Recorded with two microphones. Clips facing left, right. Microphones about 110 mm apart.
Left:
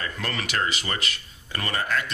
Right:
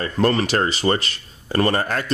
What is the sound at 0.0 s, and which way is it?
Speech, 35° right (ahead or behind).